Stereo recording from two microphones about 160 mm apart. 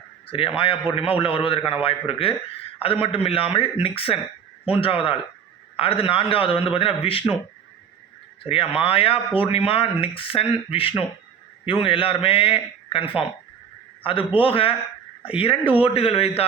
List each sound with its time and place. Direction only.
0.3 s speech: 35° left (ahead or behind)
8.4 s a man's voice: 35° left (ahead or behind)